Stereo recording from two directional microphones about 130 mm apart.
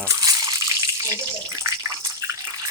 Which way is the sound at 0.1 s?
30° right (ahead or behind).